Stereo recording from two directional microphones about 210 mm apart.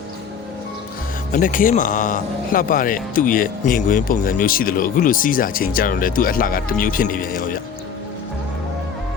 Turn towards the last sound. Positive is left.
turn(degrees=40)  # may be behind; listen again after turning